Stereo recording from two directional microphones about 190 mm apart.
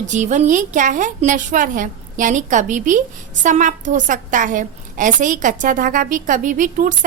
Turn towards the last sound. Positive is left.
turn(degrees=-45)  # may be behind; listen again after turning